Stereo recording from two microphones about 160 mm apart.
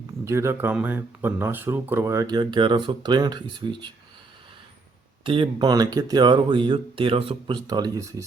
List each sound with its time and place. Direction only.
0.3 s speech: 15° right (ahead or behind)
5.2 s speech: 30° right (ahead or behind)